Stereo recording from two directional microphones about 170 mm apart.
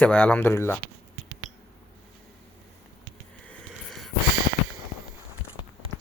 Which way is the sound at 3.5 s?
Centre (ahead or behind).